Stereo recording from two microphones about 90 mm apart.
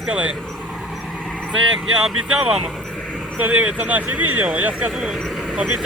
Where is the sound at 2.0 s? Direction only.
10° right (ahead or behind).